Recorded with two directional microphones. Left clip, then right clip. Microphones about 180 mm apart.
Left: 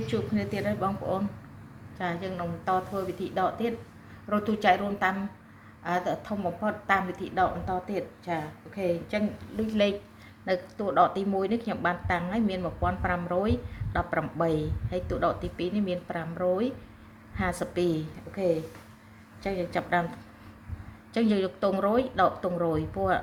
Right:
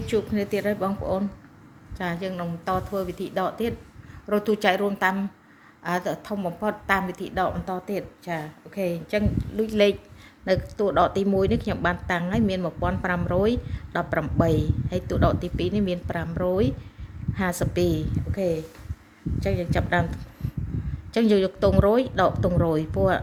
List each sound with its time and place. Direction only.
0.1 s a woman's voice: 65° right (ahead or behind)
2.0 s a woman's voice: 65° right (ahead or behind)
21.1 s a woman's voice: 60° right (ahead or behind)